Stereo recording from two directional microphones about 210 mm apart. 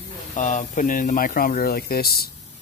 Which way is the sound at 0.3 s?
35° left (ahead or behind).